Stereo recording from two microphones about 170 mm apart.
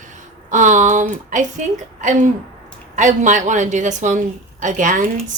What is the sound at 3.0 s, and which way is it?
Speech, 45° right (ahead or behind).